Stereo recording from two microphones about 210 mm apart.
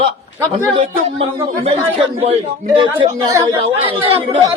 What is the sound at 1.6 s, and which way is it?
A woman's voice, 30° right (ahead or behind).